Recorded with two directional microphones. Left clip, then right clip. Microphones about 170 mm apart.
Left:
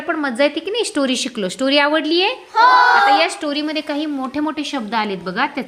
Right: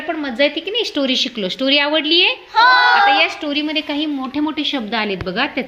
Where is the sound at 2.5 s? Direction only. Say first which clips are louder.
Even; 35° left (ahead or behind).